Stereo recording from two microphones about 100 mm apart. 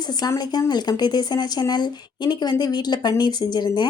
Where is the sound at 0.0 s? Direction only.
40° left (ahead or behind).